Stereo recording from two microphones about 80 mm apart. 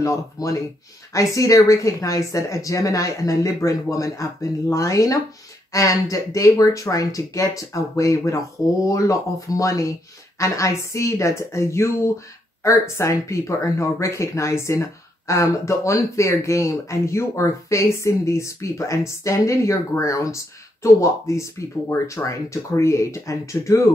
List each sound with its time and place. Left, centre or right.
0.0 s speech: left